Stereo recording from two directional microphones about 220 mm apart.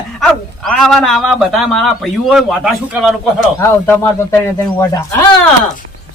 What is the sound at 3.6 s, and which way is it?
Speech, 10° left (ahead or behind).